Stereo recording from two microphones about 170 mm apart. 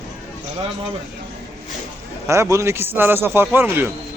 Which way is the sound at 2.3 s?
15° right (ahead or behind).